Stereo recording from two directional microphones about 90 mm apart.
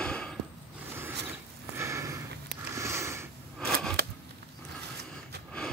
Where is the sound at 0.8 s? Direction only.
25° right (ahead or behind).